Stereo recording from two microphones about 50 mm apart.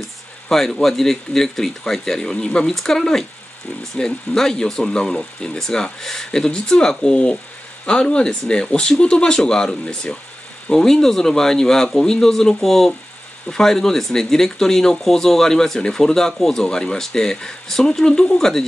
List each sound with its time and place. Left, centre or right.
0.5 s speech: centre